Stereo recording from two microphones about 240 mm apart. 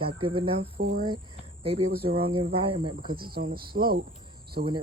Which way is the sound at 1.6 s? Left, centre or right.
Right.